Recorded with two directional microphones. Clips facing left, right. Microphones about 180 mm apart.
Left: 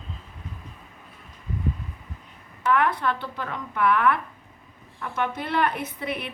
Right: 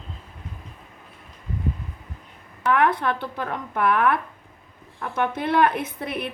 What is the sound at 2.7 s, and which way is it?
A woman's voice, 50° right (ahead or behind).